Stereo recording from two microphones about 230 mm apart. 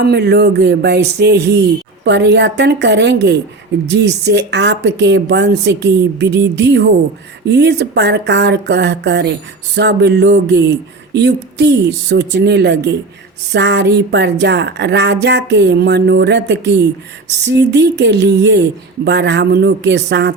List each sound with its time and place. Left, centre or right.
0.0 s speech: right